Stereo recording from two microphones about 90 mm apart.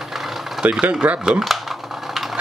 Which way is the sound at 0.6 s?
10° right (ahead or behind).